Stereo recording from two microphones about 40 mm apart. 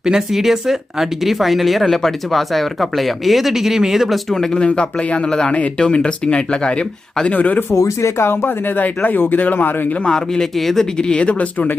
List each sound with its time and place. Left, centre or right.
0.0 s speech: centre
4.3 s a man's voice: centre
4.7 s speech: left
5.5 s speech: left
7.3 s speech: left
8.2 s speech: left
8.4 s speech: left
10.0 s a man's voice: centre
10.6 s speech: centre
10.9 s speech: left